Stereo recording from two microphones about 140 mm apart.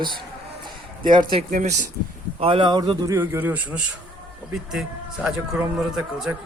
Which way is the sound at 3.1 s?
15° right (ahead or behind).